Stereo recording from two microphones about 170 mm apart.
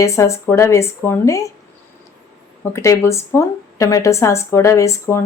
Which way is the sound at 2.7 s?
15° left (ahead or behind).